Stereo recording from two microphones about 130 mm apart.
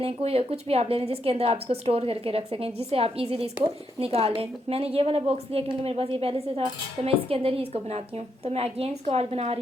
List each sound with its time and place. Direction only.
0.0 s a woman's voice: 50° right (ahead or behind)